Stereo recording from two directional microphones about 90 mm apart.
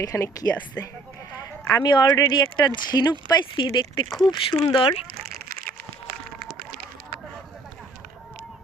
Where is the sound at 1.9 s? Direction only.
50° left (ahead or behind).